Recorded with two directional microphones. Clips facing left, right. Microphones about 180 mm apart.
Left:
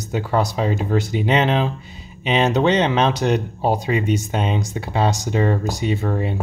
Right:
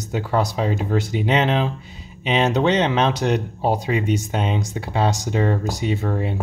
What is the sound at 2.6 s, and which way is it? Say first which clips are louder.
Speech: left 2 dB; 20° left (ahead or behind).